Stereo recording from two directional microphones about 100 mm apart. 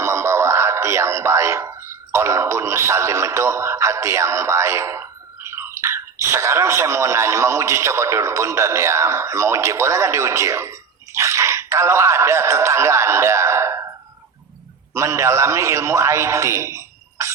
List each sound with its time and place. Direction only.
0.0 s a sound: 30° right (ahead or behind)
5.5 s speech: 25° right (ahead or behind)
14.9 s a man's voice: 30° right (ahead or behind)